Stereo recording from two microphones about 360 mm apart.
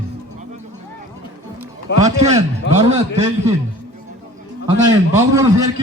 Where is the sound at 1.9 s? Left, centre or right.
Left.